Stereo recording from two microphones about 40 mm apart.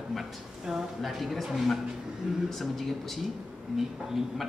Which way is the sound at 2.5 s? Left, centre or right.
Centre.